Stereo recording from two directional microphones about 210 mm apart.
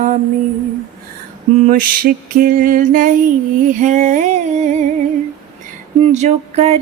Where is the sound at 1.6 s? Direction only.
40° right (ahead or behind).